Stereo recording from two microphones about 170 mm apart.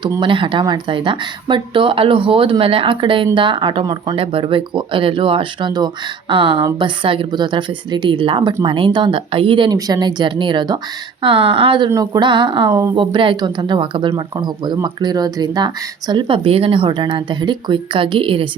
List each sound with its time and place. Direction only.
0.0 s speech: 25° right (ahead or behind)
11.9 s speech: 20° right (ahead or behind)